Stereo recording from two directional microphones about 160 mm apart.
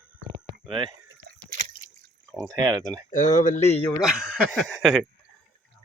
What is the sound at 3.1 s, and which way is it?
Speech, 55° left (ahead or behind).